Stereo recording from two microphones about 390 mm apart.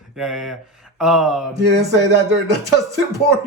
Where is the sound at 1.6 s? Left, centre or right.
Right.